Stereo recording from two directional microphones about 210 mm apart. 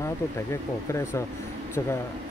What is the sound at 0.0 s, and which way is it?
Speech, 15° left (ahead or behind).